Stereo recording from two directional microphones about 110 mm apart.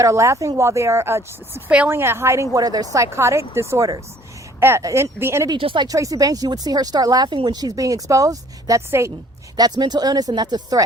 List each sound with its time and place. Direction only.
0.0 s speech: 30° right (ahead or behind)
5.5 s speech: 50° right (ahead or behind)
5.9 s speech: 30° right (ahead or behind)
9.6 s speech: 40° right (ahead or behind)